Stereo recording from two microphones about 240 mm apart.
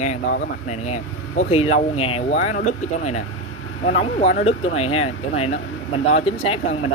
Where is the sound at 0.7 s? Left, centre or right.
Left.